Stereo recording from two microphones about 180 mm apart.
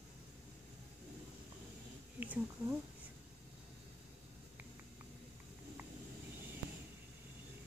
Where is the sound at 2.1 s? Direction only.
10° right (ahead or behind).